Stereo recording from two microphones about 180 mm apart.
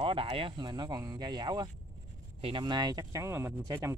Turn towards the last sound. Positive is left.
turn(degrees=-15)  # may be behind; listen again after turning